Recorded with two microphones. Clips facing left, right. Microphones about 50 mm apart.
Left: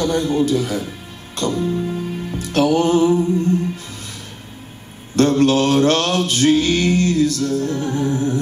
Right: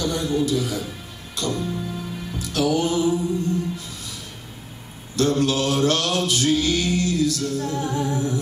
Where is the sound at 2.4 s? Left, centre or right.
Left.